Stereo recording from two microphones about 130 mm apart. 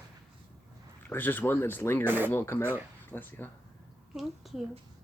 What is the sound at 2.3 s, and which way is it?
Speech, 15° left (ahead or behind).